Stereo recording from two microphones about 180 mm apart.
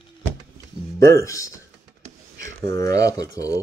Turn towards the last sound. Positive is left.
turn(degrees=20)  # may be behind; listen again after turning